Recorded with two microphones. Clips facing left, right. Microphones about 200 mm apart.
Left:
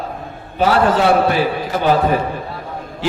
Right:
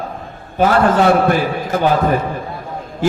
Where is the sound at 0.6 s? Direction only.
50° right (ahead or behind).